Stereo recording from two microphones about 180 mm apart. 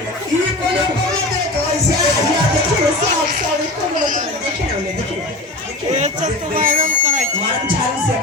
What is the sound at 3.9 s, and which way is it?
Speech, 45° right (ahead or behind).